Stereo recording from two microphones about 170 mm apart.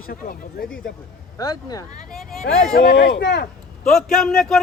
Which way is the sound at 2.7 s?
80° left.